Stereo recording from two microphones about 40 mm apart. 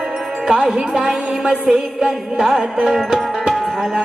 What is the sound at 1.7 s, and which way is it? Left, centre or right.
Music, right.